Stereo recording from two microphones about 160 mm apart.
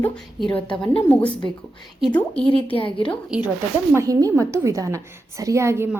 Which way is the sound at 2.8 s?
35° left (ahead or behind).